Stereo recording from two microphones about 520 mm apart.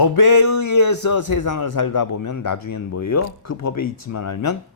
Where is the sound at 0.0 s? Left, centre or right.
Left.